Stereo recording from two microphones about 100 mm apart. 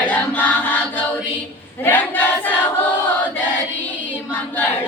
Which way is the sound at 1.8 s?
20° left (ahead or behind).